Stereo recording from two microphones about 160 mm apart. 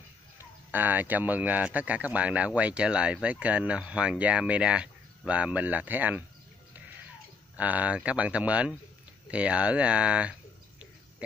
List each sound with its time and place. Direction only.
0.4 s speech: 10° right (ahead or behind)
7.5 s speech: 10° right (ahead or behind)